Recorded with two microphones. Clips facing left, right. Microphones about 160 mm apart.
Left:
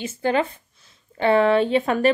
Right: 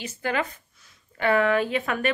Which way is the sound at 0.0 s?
30° left (ahead or behind).